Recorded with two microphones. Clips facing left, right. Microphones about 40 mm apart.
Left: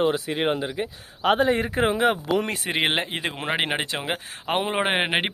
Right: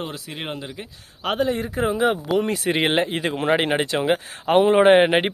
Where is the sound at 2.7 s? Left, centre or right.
Centre.